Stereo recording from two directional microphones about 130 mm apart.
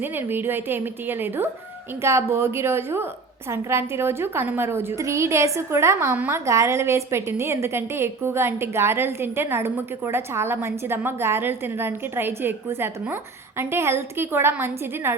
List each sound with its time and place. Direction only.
0.0 s a woman's voice: 15° right (ahead or behind)